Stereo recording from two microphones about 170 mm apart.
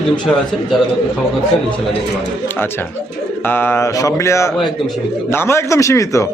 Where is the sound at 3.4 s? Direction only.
10° left (ahead or behind).